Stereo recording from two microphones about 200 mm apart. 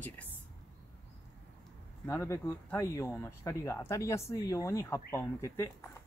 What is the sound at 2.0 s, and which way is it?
Speech, 15° left (ahead or behind).